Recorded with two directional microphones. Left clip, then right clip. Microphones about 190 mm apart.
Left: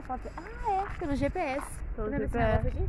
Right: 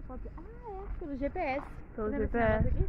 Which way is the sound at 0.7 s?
80° left.